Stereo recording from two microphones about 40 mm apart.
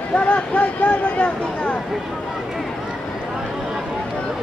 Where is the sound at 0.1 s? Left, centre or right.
Left.